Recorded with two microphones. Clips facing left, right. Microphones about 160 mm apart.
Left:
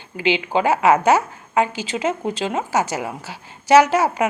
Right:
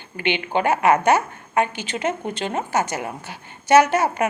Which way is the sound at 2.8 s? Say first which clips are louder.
Left 2 dB; 90° left.